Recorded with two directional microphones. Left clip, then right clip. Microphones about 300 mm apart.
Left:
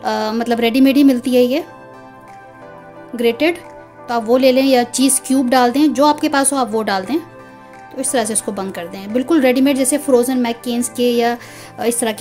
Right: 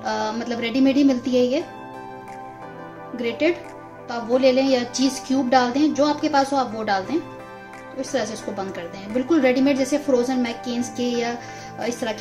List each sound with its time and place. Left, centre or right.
0.0 s a woman's voice: left
3.2 s a woman's voice: left